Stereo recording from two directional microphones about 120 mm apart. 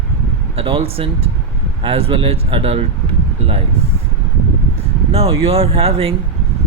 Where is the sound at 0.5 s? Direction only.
55° right (ahead or behind).